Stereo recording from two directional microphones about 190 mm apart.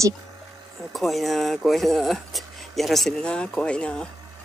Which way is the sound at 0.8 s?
Centre (ahead or behind).